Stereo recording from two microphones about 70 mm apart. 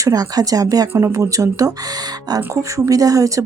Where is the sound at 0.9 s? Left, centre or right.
Right.